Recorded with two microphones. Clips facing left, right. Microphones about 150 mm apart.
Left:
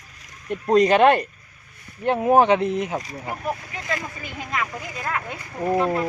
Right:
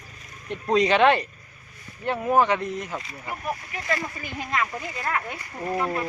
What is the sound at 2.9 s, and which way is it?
Speech, 40° left (ahead or behind).